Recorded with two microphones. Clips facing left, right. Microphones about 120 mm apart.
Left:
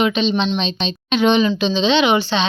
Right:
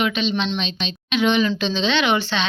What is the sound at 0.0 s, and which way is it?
A woman's voice, 25° left (ahead or behind).